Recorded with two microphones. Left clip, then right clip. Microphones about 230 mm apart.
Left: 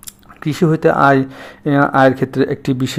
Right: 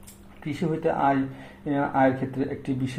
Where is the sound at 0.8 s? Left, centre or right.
Left.